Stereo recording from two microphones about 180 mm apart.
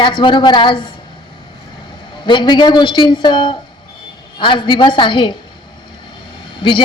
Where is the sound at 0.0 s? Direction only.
25° left (ahead or behind).